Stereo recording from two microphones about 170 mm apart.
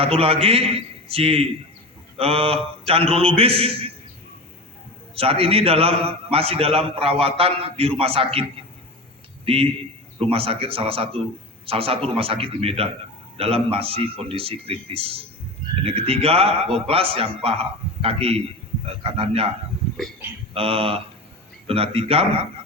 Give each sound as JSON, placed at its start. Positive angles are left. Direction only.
{"t": 0.0, "sound": "a man's voice", "side_deg": -35}
{"t": 5.1, "sound": "a man's voice", "side_deg": -35}
{"t": 20.5, "sound": "a man's voice", "side_deg": -35}